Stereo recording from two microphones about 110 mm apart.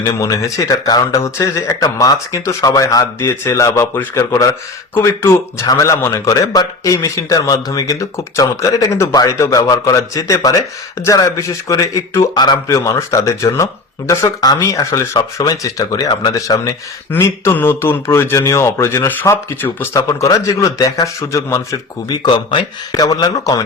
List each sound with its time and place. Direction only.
0.0 s speech: 35° left (ahead or behind)
17.1 s speech: 20° left (ahead or behind)
20.1 s speech: 30° left (ahead or behind)
22.1 s speech: 45° left (ahead or behind)